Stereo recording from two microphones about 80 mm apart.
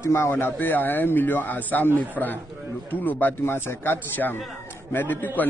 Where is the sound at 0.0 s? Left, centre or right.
Left.